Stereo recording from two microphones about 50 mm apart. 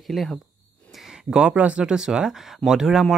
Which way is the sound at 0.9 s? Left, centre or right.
Centre.